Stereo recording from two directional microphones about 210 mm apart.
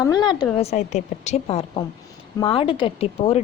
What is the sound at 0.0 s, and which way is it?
A woman's voice, 20° left (ahead or behind).